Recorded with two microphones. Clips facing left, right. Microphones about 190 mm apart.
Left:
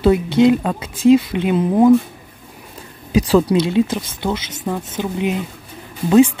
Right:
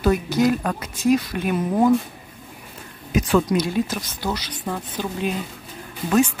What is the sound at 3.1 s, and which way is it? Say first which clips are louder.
Speech: left 5 dB; 35° left (ahead or behind).